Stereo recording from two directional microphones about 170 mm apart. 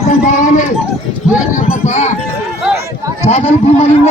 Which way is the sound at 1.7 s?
45° left (ahead or behind).